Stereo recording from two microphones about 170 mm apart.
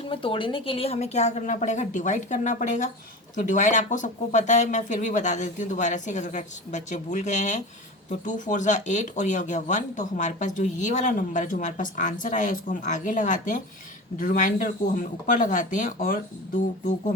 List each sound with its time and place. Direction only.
0.1 s speech: 30° left (ahead or behind); by 16.2 s 50° left (ahead or behind)